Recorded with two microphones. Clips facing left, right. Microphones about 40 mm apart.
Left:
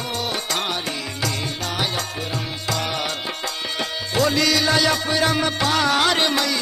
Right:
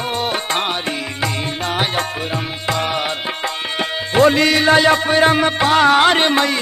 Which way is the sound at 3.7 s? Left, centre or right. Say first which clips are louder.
Right 7 dB; right.